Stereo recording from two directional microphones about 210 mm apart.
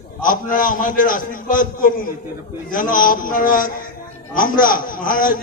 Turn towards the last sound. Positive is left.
turn(degrees=40)  # may be behind; listen again after turning